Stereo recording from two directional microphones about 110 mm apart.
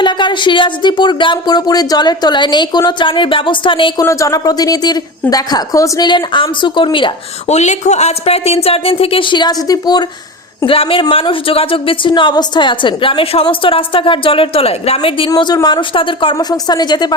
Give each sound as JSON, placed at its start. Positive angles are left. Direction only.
{"t": 0.0, "sound": "a woman's voice", "side_deg": 45}
{"t": 4.0, "sound": "speech", "side_deg": 30}
{"t": 6.1, "sound": "a woman's voice", "side_deg": 45}
{"t": 7.4, "sound": "speech", "side_deg": 90}
{"t": 10.7, "sound": "a woman's voice", "side_deg": 55}
{"t": 15.6, "sound": "a woman's voice", "side_deg": 45}
{"t": 16.3, "sound": "speech", "side_deg": 40}